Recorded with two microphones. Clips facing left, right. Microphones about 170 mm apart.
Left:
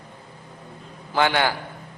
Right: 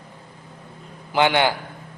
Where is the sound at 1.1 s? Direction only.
20° right (ahead or behind).